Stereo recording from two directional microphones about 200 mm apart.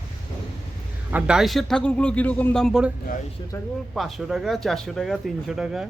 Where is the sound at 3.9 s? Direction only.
Centre (ahead or behind).